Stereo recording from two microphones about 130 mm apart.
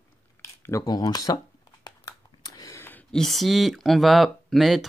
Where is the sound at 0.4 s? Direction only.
20° left (ahead or behind).